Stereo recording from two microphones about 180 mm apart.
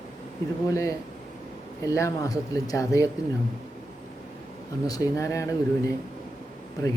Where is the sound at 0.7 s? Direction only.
15° left (ahead or behind).